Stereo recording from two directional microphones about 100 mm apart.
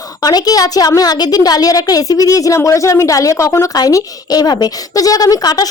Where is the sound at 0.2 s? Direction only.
40° left (ahead or behind).